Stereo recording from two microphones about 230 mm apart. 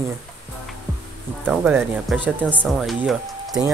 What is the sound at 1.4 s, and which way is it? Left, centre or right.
Speech, centre.